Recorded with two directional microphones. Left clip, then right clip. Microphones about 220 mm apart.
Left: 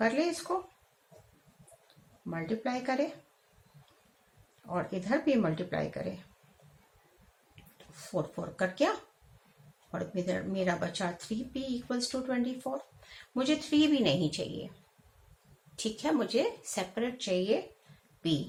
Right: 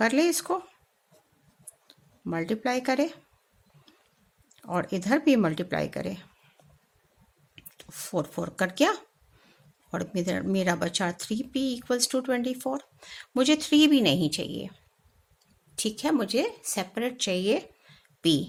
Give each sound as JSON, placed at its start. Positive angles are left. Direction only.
{"t": 0.0, "sound": "speech", "side_deg": -45}
{"t": 2.3, "sound": "speech", "side_deg": -45}
{"t": 4.7, "sound": "speech", "side_deg": -50}
{"t": 8.1, "sound": "speech", "side_deg": -45}
{"t": 9.9, "sound": "speech", "side_deg": -45}
{"t": 15.7, "sound": "speech", "side_deg": -45}